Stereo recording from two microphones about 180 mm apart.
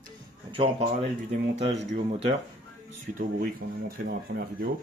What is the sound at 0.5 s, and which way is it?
Speech, 35° right (ahead or behind).